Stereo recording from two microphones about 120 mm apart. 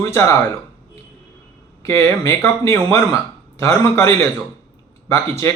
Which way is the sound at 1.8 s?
20° left (ahead or behind).